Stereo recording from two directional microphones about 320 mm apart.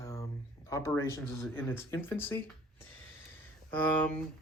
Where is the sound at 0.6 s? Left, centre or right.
Centre.